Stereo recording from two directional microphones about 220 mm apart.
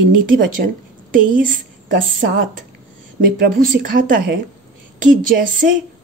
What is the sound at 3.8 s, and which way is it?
A woman's voice, 40° right (ahead or behind).